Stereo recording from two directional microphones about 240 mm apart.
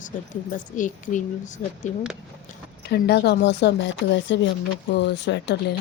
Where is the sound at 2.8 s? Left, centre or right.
Left.